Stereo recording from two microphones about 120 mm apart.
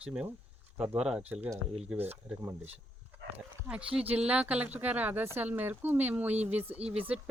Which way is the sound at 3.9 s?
10° right (ahead or behind).